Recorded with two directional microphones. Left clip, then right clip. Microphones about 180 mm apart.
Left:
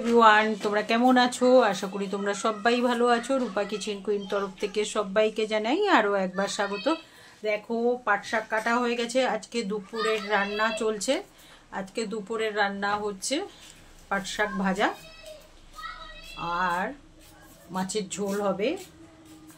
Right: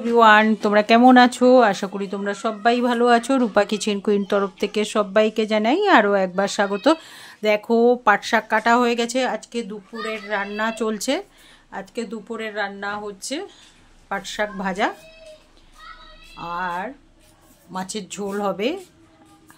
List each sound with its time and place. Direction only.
0.1 s speech: 35° right (ahead or behind)
7.4 s speech: 65° right (ahead or behind); by 11.2 s 35° right (ahead or behind)
11.7 s speech: 20° right (ahead or behind)
16.3 s speech: 20° right (ahead or behind); by 18.8 s 45° right (ahead or behind)